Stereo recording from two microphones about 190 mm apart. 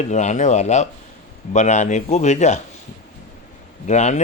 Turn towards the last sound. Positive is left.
turn(degrees=40)  # may be behind; listen again after turning